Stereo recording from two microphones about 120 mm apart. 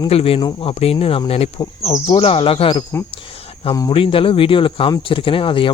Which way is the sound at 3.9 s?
50° left (ahead or behind).